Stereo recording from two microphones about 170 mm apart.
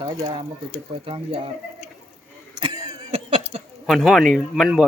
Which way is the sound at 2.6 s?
30° right (ahead or behind).